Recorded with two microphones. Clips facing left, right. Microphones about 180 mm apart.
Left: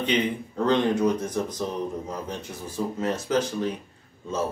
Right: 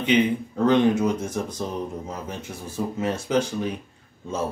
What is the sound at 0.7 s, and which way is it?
Speech, 10° right (ahead or behind).